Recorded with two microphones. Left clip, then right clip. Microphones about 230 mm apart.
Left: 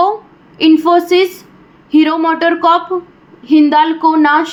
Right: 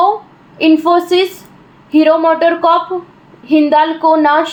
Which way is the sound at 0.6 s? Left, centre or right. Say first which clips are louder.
Left 1 dB; left.